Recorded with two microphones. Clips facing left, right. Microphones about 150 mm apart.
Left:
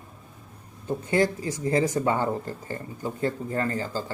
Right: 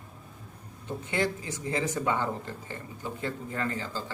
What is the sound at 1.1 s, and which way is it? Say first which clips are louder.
Speech: left 6 dB; 40° left (ahead or behind).